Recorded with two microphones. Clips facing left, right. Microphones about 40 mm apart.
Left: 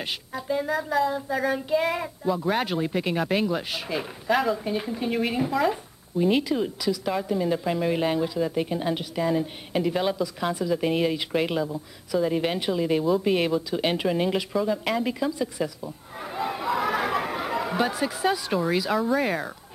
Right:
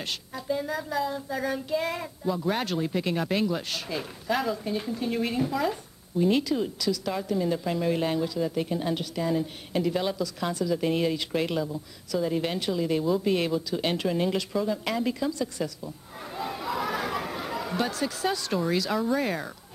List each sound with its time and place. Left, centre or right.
0.0 s child singing: centre
13.2 s speech: centre